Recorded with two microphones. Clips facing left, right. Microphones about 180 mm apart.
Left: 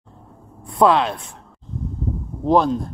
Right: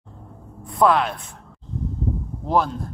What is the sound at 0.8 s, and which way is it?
Speech, 25° left (ahead or behind).